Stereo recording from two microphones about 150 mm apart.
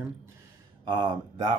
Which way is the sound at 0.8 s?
30° right (ahead or behind).